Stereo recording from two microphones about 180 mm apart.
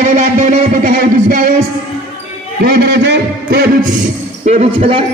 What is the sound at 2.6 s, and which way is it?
A man's voice, 65° right (ahead or behind).